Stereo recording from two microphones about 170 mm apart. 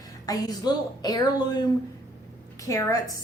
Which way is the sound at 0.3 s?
20° left (ahead or behind).